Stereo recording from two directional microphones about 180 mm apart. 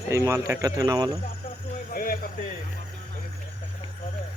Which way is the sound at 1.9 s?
55° left (ahead or behind).